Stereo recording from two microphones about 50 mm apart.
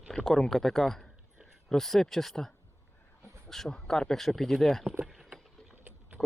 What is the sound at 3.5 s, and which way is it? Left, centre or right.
Speech, centre.